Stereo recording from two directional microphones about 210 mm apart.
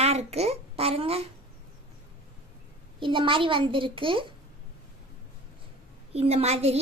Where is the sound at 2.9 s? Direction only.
25° right (ahead or behind).